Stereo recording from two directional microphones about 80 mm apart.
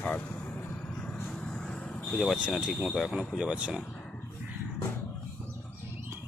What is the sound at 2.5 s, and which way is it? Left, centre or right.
Speech, centre.